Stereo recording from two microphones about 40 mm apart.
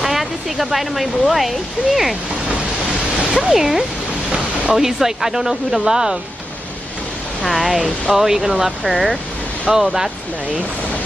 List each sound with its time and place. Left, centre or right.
0.0 s speech: centre
3.2 s speech: right
3.5 s speech: centre
7.4 s speech: centre